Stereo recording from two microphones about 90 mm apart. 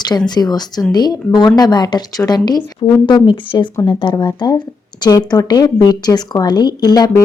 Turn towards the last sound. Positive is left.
turn(degrees=45)  # may be behind; listen again after turning